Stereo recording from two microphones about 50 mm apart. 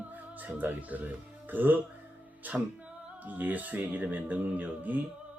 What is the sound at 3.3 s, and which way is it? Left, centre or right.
Speech, right.